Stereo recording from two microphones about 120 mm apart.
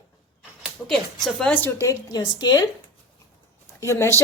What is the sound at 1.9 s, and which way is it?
Speech, 30° left (ahead or behind).